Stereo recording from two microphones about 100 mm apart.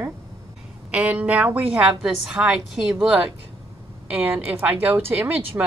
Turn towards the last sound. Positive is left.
turn(degrees=-15)  # may be behind; listen again after turning